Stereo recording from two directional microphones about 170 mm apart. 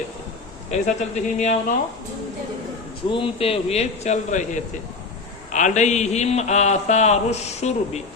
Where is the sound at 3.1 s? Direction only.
35° left (ahead or behind).